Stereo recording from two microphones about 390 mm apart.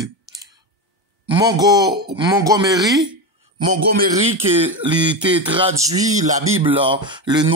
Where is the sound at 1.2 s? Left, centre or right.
Centre.